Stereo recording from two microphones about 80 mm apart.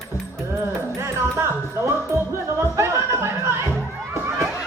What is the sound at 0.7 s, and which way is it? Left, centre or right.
Music, right.